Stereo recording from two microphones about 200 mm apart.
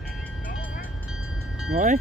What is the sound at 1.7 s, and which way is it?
Cowbell, 40° right (ahead or behind).